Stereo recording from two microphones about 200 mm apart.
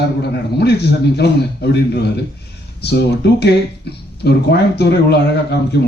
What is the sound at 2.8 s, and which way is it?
A man's voice, 55° left (ahead or behind).